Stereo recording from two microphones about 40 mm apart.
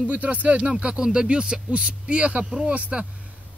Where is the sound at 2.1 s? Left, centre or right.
Right.